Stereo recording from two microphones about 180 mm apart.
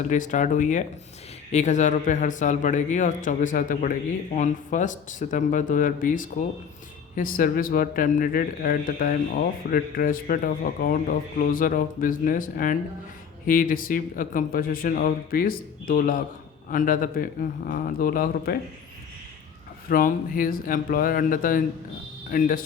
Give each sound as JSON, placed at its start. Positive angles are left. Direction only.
{"t": 0.1, "sound": "a man's voice", "side_deg": 45}
{"t": 19.9, "sound": "a man's voice", "side_deg": 50}